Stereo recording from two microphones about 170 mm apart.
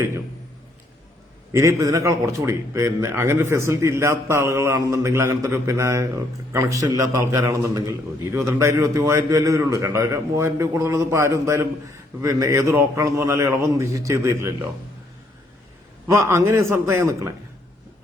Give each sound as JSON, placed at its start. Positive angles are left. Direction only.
{"t": 1.5, "sound": "a man's voice", "side_deg": -15}
{"t": 16.1, "sound": "a man's voice", "side_deg": -15}